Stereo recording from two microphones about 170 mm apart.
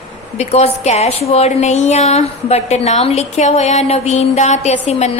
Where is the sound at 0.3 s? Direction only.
40° left (ahead or behind).